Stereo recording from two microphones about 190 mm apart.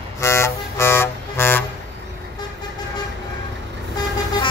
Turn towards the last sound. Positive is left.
turn(degrees=20)  # may be behind; listen again after turning